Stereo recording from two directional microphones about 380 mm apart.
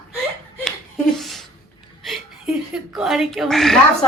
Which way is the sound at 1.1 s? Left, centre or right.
Centre.